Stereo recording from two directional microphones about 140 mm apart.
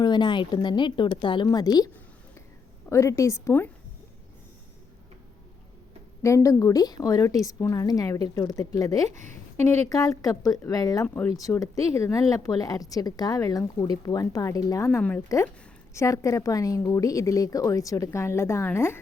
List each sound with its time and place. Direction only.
0.0 s speech: 30° left (ahead or behind)
2.9 s speech: 20° left (ahead or behind)
6.2 s speech: 20° left (ahead or behind)
9.0 s speech: 60° right (ahead or behind)
9.6 s speech: 20° left (ahead or behind)
11.0 s speech: 15° left (ahead or behind)
11.3 s speech: 25° left (ahead or behind)